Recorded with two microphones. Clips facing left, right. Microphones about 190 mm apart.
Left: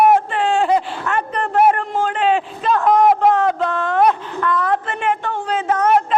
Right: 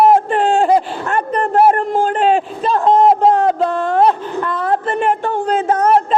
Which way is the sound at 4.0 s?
30° right (ahead or behind).